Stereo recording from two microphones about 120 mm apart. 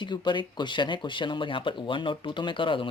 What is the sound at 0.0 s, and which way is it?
Speech, 40° left (ahead or behind).